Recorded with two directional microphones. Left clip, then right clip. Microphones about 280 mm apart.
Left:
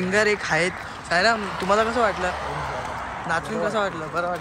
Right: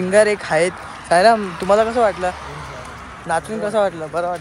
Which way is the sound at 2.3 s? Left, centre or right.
Left.